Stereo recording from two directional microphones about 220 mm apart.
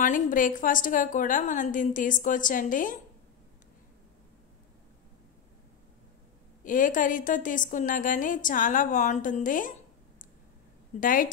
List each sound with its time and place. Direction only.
0.0 s a woman's voice: 35° left (ahead or behind)
6.6 s a woman's voice: 35° left (ahead or behind)
11.0 s a woman's voice: 40° left (ahead or behind)